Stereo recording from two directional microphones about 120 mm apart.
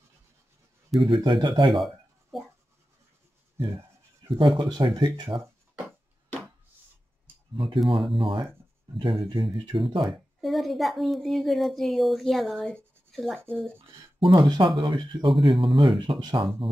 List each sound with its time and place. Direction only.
1.0 s speech: 45° right (ahead or behind)
4.3 s speech: 45° right (ahead or behind)
7.5 s speech: 45° right (ahead or behind)
10.0 s a woman's voice: centre (ahead or behind)
14.3 s speech: 35° right (ahead or behind)